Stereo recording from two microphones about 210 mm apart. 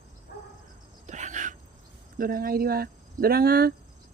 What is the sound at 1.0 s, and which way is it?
Cricket, 35° right (ahead or behind).